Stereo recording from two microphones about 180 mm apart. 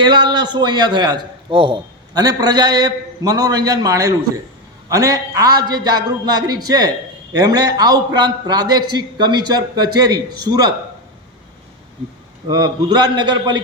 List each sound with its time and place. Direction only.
0.0 s a man's voice: 25° right (ahead or behind)
12.5 s a man's voice: 25° right (ahead or behind)